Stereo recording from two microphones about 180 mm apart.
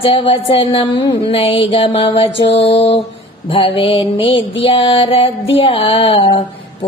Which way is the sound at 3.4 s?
30° left (ahead or behind).